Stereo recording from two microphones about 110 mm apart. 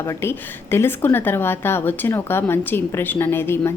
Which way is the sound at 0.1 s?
20° left (ahead or behind).